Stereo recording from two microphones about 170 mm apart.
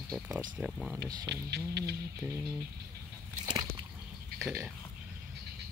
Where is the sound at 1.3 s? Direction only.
75° right (ahead or behind).